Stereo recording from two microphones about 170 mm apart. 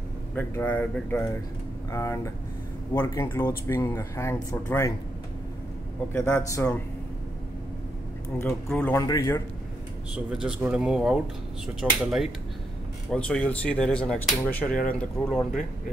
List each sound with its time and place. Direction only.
0.3 s speech: 10° left (ahead or behind)
6.1 s speech: 15° left (ahead or behind)
8.6 s speech: 10° left (ahead or behind)
9.0 s a man's voice: 20° left (ahead or behind)
10.1 s speech: 5° right (ahead or behind)